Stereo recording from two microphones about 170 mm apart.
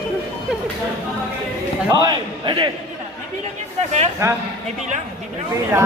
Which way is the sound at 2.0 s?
25° right (ahead or behind).